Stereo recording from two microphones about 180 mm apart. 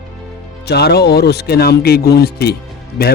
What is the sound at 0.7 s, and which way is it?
Speech, 65° left (ahead or behind).